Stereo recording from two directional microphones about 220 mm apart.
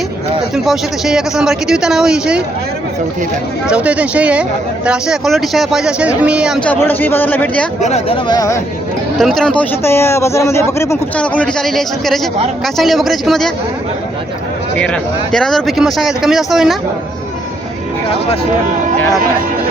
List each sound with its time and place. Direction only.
0.5 s speech: centre (ahead or behind)
3.7 s a man's voice: 5° right (ahead or behind)
7.8 s speech: 30° left (ahead or behind)
9.1 s speech: centre (ahead or behind)
14.8 s speech: 5° left (ahead or behind)